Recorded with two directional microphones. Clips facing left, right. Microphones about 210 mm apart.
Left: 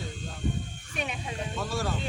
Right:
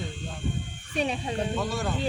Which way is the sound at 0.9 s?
35° right (ahead or behind).